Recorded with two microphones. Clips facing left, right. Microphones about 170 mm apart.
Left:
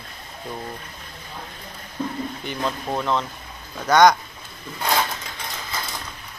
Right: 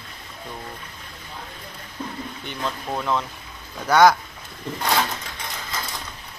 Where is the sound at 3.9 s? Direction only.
5° right (ahead or behind).